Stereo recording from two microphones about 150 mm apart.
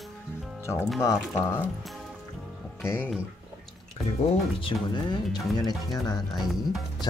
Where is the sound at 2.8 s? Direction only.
15° left (ahead or behind).